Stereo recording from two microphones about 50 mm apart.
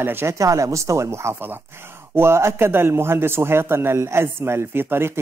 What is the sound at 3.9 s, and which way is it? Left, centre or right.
Speech, right.